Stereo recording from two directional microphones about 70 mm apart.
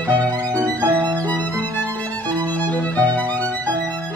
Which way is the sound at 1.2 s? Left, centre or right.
Left.